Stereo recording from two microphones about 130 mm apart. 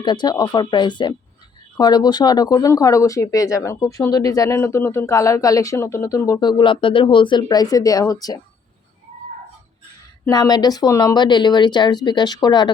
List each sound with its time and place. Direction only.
0.0 s speech: 35° left (ahead or behind)
10.2 s speech: 30° left (ahead or behind)